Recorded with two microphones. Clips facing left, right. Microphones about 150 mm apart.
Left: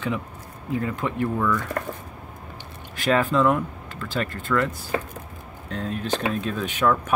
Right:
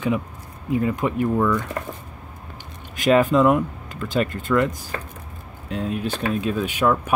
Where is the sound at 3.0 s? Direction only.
20° right (ahead or behind).